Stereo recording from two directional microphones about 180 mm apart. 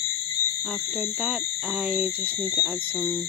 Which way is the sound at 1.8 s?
5° right (ahead or behind).